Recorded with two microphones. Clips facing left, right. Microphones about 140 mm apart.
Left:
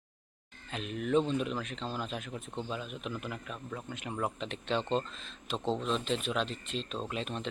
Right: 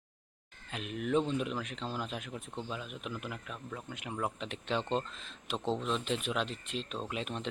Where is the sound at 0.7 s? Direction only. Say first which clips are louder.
Left 2 dB; 10° right (ahead or behind).